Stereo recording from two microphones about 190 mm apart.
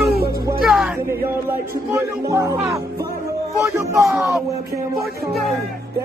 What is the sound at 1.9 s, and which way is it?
Speech, 15° right (ahead or behind).